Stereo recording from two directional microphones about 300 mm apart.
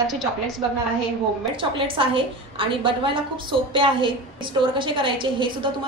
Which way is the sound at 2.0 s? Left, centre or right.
Centre.